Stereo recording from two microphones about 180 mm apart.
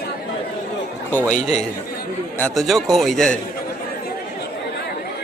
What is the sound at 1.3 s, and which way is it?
Speech, 40° left (ahead or behind).